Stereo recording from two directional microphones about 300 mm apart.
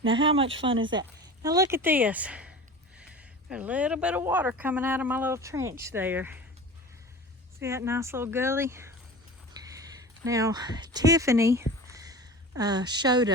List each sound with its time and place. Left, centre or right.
0.0 s speech: centre
7.6 s speech: centre
9.5 s a sound: centre